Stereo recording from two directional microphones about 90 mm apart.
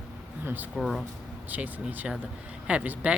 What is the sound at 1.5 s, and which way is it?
Speech, 20° right (ahead or behind).